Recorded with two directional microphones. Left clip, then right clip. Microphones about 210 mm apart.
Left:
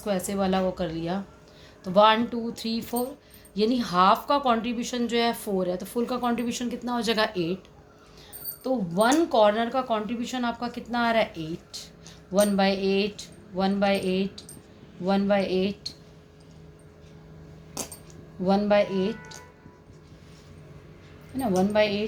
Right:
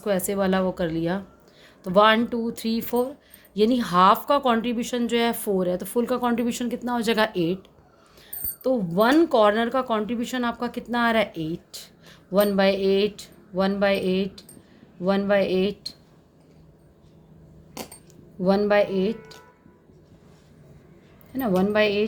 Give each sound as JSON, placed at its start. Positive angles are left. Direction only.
{"t": 0.0, "sound": "speech", "side_deg": -55}
{"t": 8.6, "sound": "speech", "side_deg": -55}
{"t": 18.4, "sound": "speech", "side_deg": -55}
{"t": 21.3, "sound": "speech", "side_deg": -55}